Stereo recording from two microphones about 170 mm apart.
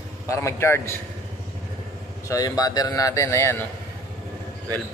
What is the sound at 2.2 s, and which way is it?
Speech, 20° left (ahead or behind).